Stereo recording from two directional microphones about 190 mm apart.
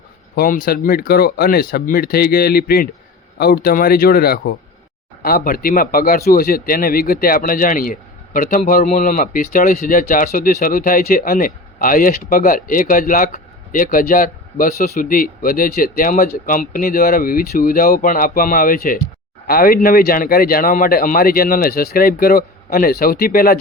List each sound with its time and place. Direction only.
0.3 s speech: 50° left (ahead or behind)